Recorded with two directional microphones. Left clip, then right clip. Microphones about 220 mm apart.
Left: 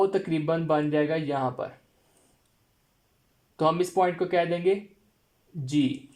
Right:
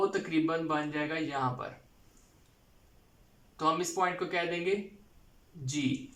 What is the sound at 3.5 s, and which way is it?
Speech, 40° left (ahead or behind).